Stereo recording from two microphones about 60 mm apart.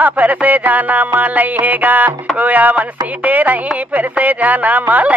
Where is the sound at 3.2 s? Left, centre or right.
Right.